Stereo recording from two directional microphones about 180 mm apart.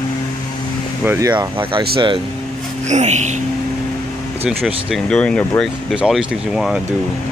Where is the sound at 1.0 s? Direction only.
15° right (ahead or behind).